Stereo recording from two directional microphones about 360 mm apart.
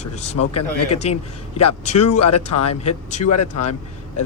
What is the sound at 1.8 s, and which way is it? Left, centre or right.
Speech, centre.